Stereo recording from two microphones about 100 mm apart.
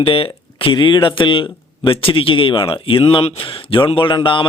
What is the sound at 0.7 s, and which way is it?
A man's voice, 50° left (ahead or behind).